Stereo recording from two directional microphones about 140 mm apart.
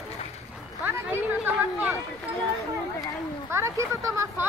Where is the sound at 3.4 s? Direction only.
20° right (ahead or behind).